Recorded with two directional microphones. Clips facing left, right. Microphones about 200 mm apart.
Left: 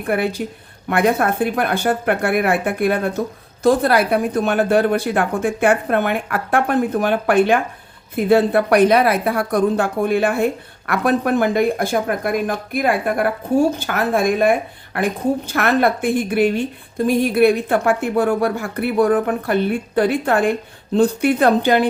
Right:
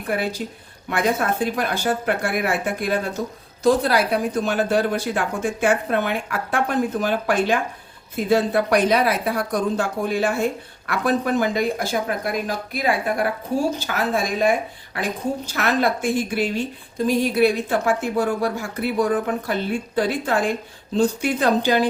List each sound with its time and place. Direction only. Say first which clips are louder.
0.1 s a woman's voice: left 4 dB; 60° left (ahead or behind)